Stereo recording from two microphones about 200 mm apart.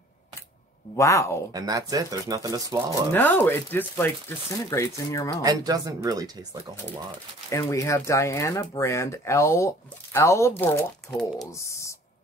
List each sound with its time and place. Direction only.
0.9 s speech: 15° left (ahead or behind)
1.5 s speech: 20° right (ahead or behind)
2.9 s speech: 10° left (ahead or behind)
5.4 s speech: 20° right (ahead or behind)
7.4 s speech: 15° left (ahead or behind)
11.5 s speech: 15° left (ahead or behind)